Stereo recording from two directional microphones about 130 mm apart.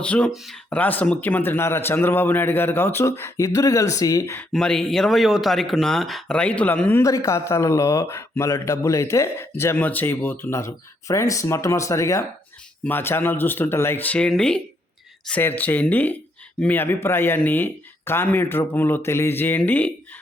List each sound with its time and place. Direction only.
0.0 s a man's voice: 10° left (ahead or behind); by 4.4 s 25° left (ahead or behind)
4.5 s speech: 5° left (ahead or behind)
7.0 s a man's voice: 25° left (ahead or behind)